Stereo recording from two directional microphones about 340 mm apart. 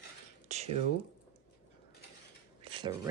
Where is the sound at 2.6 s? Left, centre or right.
Centre.